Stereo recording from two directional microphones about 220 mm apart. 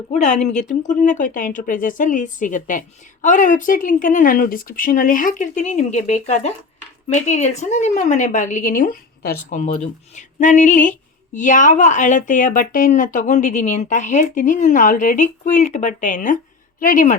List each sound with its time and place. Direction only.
0.1 s speech: 30° left (ahead or behind)